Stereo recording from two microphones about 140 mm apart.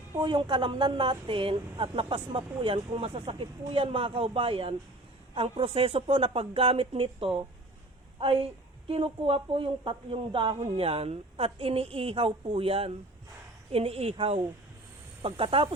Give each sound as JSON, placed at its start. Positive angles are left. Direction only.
{"t": 0.2, "sound": "speech", "side_deg": -35}